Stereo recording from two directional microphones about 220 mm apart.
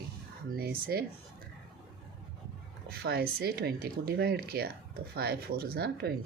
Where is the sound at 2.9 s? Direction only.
45° right (ahead or behind).